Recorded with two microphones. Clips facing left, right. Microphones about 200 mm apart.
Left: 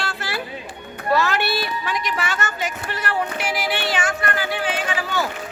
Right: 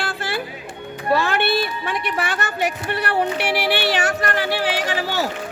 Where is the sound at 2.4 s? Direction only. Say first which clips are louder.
Right 4 dB; 60° right (ahead or behind).